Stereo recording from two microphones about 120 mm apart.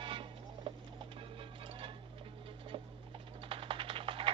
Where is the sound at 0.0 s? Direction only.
45° right (ahead or behind).